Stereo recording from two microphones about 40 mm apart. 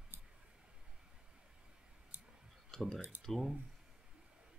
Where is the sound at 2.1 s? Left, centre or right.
Right.